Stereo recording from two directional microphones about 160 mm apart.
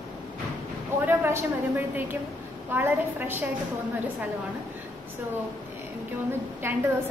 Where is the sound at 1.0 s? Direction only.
15° right (ahead or behind).